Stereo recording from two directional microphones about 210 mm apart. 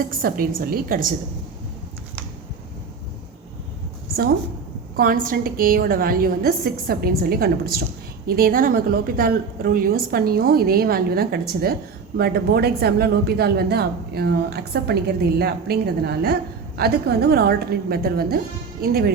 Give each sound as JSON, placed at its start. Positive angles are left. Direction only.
{"t": 0.2, "sound": "a woman's voice", "side_deg": -45}
{"t": 4.9, "sound": "a woman's voice", "side_deg": -40}